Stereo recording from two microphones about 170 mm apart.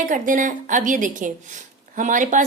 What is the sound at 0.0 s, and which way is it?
A woman's voice, 50° right (ahead or behind).